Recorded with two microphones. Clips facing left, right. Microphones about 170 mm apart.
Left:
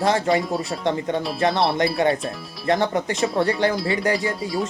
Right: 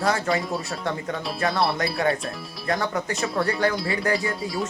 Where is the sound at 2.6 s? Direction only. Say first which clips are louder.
Left 5 dB; 25° left (ahead or behind).